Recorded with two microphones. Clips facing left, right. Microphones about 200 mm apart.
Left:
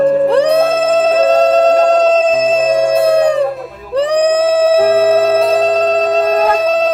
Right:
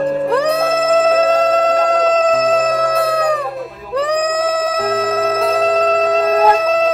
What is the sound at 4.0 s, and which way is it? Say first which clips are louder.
Music: left 5 dB; 30° left (ahead or behind).